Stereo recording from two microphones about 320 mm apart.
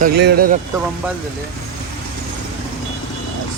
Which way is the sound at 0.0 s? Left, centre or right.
Right.